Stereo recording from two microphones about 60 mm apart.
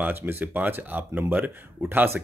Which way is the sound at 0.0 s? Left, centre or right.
Right.